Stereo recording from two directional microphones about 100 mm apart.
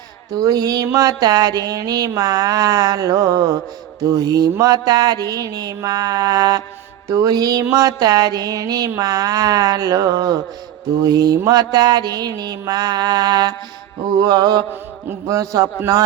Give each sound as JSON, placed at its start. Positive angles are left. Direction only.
{"t": 0.3, "sound": "mantra", "side_deg": -35}